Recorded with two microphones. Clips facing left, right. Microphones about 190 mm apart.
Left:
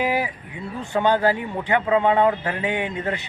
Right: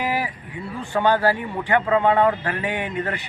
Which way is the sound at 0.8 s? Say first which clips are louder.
Even; 15° left (ahead or behind).